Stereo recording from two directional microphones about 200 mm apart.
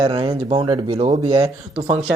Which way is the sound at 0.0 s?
25° right (ahead or behind).